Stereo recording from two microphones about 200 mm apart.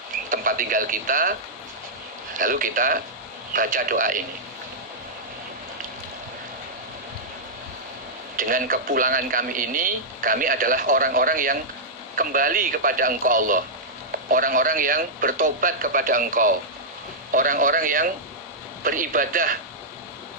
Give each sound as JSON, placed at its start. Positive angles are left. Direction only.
{"t": 0.3, "sound": "speech", "side_deg": -45}
{"t": 2.4, "sound": "a man's voice", "side_deg": -45}
{"t": 8.4, "sound": "a man's voice", "side_deg": -45}